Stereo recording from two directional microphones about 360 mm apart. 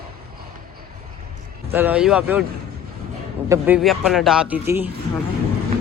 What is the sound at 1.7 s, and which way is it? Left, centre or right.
Speech, centre.